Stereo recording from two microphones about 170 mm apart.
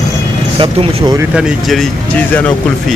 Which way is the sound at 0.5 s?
35° right (ahead or behind).